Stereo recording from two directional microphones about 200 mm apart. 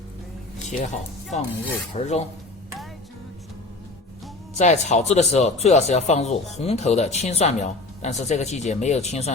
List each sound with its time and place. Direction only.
0.7 s speech: 35° left (ahead or behind)
4.5 s speech: 35° left (ahead or behind)